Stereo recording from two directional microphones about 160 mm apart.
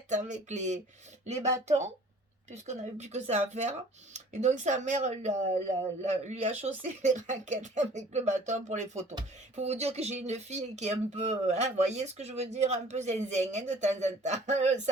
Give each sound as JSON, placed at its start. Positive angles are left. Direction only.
{"t": 0.1, "sound": "speech", "side_deg": -50}